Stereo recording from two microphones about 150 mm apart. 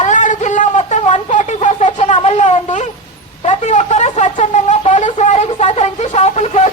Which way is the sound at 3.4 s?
50° left (ahead or behind).